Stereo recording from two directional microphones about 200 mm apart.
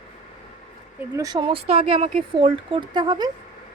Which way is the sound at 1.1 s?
20° right (ahead or behind).